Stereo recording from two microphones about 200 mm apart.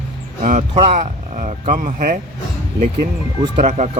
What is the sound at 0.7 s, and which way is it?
Speech, 30° right (ahead or behind).